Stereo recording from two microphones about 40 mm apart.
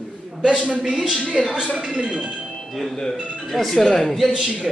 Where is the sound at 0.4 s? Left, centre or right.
Right.